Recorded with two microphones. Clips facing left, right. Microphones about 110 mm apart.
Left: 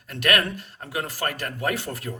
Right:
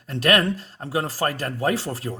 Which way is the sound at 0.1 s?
30° right (ahead or behind).